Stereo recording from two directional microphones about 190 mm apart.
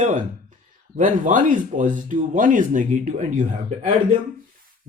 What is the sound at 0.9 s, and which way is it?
Speech, 45° right (ahead or behind).